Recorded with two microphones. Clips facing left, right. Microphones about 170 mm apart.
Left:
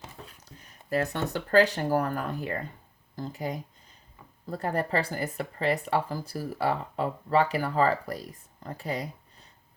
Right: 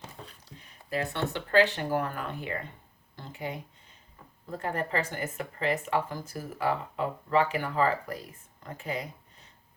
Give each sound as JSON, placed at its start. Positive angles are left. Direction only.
{"t": 0.6, "sound": "speech", "side_deg": 45}